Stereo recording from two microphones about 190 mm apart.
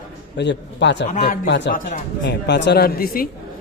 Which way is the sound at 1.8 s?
65° left (ahead or behind).